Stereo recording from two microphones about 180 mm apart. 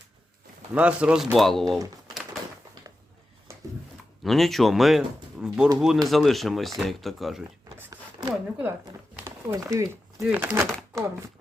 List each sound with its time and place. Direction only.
0.7 s speech: 5° right (ahead or behind)
4.2 s speech: centre (ahead or behind)
7.8 s a sound: 15° right (ahead or behind)
9.7 s speech: 15° right (ahead or behind)